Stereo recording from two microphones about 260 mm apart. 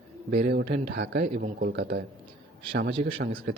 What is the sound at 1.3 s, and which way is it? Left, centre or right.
A man's voice, right.